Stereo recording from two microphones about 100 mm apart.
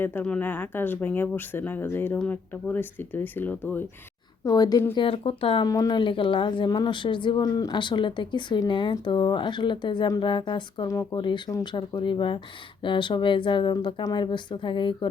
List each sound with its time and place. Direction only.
0.0 s speech: 20° left (ahead or behind)
4.4 s a woman's voice: 40° left (ahead or behind)
4.9 s speech: 70° left (ahead or behind)
5.6 s a woman's voice: 40° left (ahead or behind)
6.0 s speech: 55° left (ahead or behind)
6.7 s speech: 45° left (ahead or behind)
10.8 s a woman's voice: 35° left (ahead or behind)
11.2 s speech: 50° left (ahead or behind)